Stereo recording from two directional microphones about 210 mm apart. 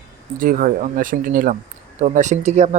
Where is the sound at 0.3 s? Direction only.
40° right (ahead or behind).